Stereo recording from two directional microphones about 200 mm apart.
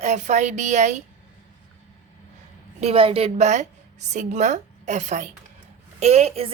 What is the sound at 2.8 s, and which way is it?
A woman's voice, 30° right (ahead or behind).